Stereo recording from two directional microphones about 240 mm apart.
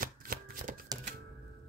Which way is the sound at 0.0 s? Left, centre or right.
Right.